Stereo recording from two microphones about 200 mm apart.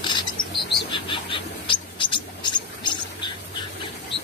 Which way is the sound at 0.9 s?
25° left (ahead or behind).